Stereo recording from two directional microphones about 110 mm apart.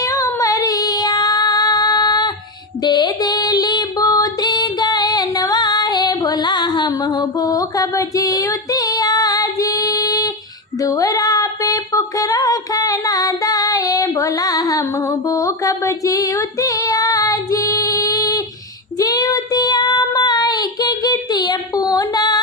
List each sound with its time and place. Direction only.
0.0 s child singing: 30° left (ahead or behind)
2.8 s female singing: 40° left (ahead or behind)
10.8 s a sound: 30° left (ahead or behind)
18.9 s child singing: 35° left (ahead or behind)